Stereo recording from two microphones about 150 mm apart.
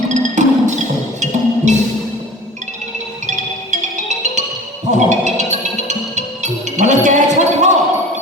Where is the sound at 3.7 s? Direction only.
50° right (ahead or behind).